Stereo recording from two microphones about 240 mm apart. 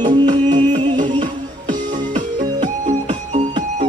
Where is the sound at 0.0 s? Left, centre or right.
Centre.